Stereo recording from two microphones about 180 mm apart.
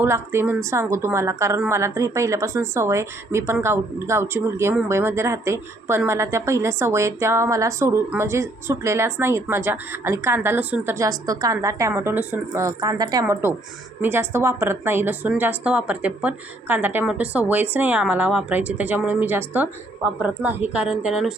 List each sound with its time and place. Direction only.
0.0 s a woman's voice: 15° right (ahead or behind)